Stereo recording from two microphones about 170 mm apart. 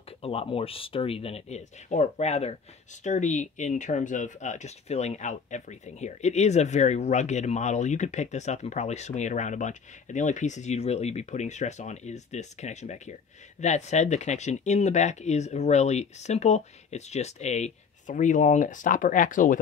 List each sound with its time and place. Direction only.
0.2 s speech: 35° left (ahead or behind); by 19.6 s 50° left (ahead or behind)